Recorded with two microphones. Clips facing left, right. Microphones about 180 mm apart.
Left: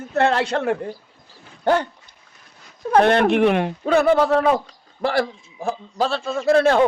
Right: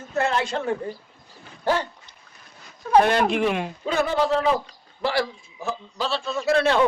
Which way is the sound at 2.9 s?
60° left (ahead or behind).